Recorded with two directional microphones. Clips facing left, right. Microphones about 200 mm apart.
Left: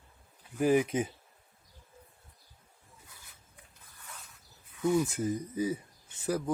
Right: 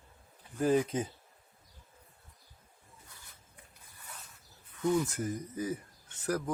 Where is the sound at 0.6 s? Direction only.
15° left (ahead or behind).